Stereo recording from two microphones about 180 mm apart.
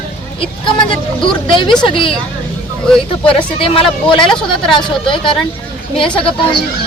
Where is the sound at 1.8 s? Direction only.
30° left (ahead or behind).